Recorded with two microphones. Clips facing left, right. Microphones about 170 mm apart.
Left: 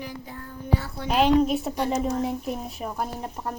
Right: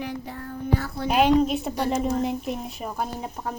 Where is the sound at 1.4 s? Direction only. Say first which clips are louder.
Even; centre (ahead or behind).